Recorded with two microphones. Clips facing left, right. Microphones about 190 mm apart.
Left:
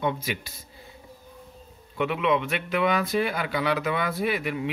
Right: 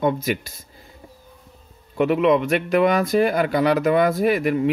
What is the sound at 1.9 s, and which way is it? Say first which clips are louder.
Speech: right 7 dB; 45° right (ahead or behind).